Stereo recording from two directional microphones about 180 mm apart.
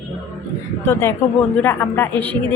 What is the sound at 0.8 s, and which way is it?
A woman's voice, 15° left (ahead or behind).